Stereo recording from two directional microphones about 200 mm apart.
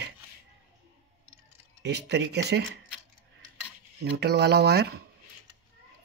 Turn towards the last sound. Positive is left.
turn(degrees=-55)  # may be behind; listen again after turning